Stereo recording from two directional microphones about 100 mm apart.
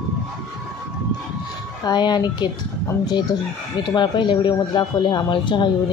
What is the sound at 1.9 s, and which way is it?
Speech, 45° left (ahead or behind).